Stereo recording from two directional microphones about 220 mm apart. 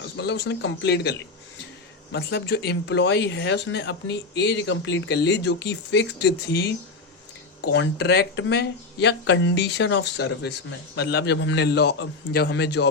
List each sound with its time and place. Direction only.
0.2 s speech: 50° left (ahead or behind)
2.1 s speech: 50° left (ahead or behind)